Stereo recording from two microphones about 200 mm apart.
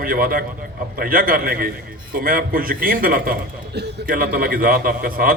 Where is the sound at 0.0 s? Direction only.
45° right (ahead or behind).